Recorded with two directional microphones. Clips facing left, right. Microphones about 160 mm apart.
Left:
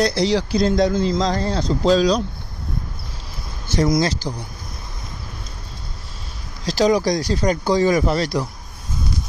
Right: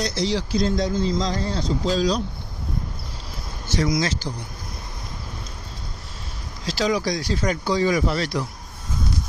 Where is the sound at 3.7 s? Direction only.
45° left (ahead or behind).